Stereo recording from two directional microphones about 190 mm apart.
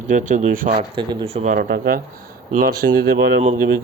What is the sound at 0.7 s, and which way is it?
Speech, 25° right (ahead or behind).